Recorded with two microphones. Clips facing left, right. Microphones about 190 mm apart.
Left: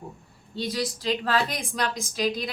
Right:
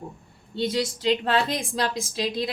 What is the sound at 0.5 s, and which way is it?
A woman's voice, 25° right (ahead or behind).